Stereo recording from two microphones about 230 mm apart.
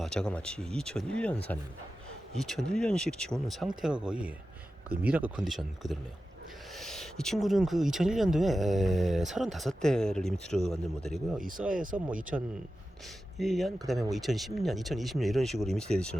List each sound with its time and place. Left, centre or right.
0.0 s speech: centre
2.4 s speech: centre
11.3 s speech: right
12.3 s speech: centre